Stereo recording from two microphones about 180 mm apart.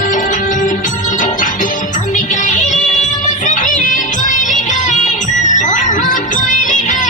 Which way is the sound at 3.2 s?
45° left (ahead or behind).